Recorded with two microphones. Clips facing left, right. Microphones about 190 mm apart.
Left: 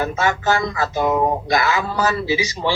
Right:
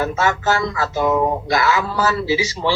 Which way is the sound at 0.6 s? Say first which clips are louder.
Right 1 dB; 20° left (ahead or behind).